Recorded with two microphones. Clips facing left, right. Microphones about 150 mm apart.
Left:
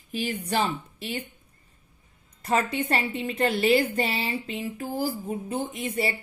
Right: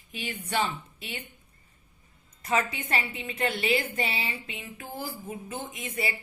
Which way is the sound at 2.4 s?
35° left (ahead or behind).